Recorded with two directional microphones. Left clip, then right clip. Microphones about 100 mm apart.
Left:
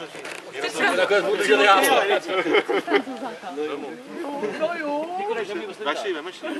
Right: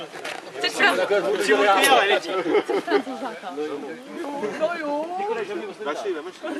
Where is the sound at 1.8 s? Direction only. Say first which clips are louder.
Right 2 dB; 15° right (ahead or behind).